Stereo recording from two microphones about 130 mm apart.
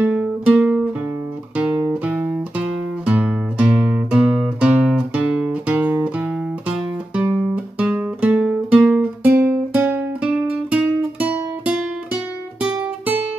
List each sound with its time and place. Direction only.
0.0 s music: 10° right (ahead or behind)
7.5 s music: 10° right (ahead or behind)